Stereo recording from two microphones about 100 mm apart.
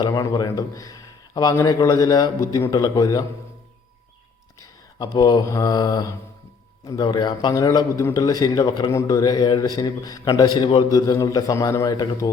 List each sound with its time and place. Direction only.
0.0 s speech: 40° left (ahead or behind)
4.9 s a man's voice: 40° left (ahead or behind)
8.9 s speech: 30° left (ahead or behind)
11.9 s a man's voice: 45° left (ahead or behind)